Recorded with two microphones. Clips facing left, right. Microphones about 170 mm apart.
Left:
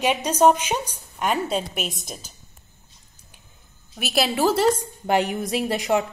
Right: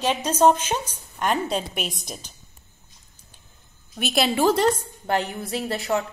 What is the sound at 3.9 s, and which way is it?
A woman's voice, centre (ahead or behind).